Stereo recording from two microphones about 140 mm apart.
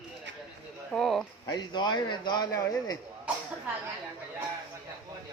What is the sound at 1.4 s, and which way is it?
A man's voice, 30° left (ahead or behind).